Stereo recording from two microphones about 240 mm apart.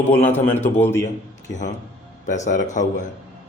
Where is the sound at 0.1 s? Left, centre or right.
Centre.